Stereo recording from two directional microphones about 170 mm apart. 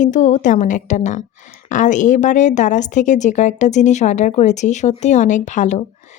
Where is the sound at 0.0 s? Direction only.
45° left (ahead or behind).